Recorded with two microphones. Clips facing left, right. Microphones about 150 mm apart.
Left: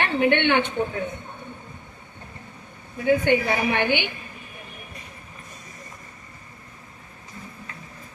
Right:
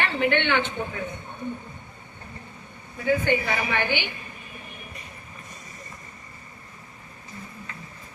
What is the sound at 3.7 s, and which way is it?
Speech, 55° left (ahead or behind).